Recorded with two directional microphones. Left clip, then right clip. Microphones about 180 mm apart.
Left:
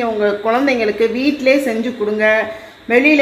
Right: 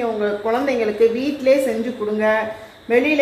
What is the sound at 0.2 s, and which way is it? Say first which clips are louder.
A woman's voice: left 5 dB; 45° left (ahead or behind).